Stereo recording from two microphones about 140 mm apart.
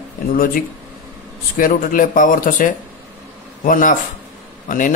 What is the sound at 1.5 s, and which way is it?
Speech, 80° left.